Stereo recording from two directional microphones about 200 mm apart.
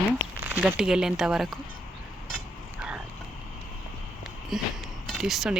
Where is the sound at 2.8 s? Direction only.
5° right (ahead or behind).